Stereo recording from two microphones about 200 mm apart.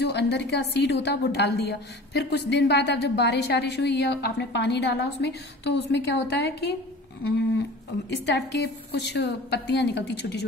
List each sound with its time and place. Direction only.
0.0 s a woman's voice: 55° left (ahead or behind)
8.5 s a woman's voice: 55° left (ahead or behind)